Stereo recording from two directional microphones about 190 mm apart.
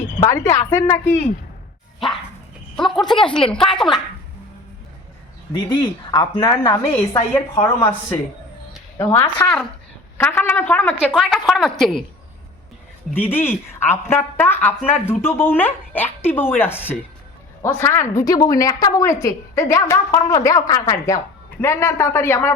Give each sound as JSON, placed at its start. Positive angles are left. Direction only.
{"t": 0.2, "sound": "a woman's voice", "side_deg": 15}
{"t": 2.7, "sound": "a woman's voice", "side_deg": 0}
{"t": 5.6, "sound": "speech", "side_deg": 20}
{"t": 7.1, "sound": "a woman's voice", "side_deg": 15}
{"t": 13.1, "sound": "a woman's voice", "side_deg": 10}